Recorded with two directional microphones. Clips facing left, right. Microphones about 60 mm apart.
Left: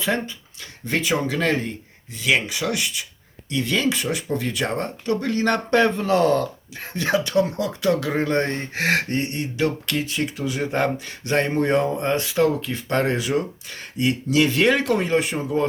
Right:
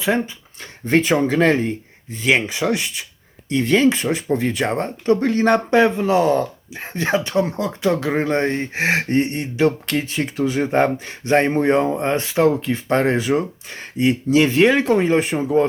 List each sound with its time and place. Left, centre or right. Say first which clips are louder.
0.0 s speech: right 4 dB; centre
0.6 s speech: right 7 dB; right
5.7 s speech: left 1 dB; centre